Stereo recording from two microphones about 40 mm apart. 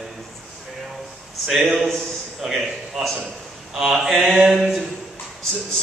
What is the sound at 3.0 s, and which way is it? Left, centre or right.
A man's voice, centre.